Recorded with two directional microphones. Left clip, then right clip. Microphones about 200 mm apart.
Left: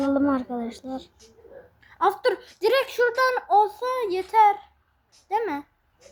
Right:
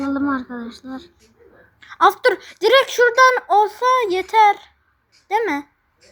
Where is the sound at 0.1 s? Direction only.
25° left (ahead or behind).